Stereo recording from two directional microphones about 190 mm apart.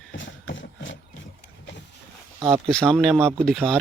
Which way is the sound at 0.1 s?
75° left (ahead or behind).